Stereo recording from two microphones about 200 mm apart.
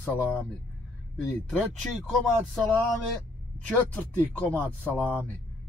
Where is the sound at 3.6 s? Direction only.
5° left (ahead or behind).